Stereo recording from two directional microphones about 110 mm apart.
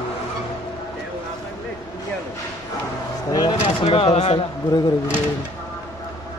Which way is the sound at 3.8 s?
65° left (ahead or behind).